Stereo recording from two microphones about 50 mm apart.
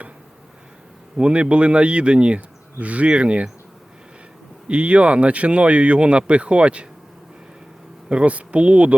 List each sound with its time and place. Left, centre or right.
1.1 s speech: right
4.7 s speech: right
8.1 s speech: right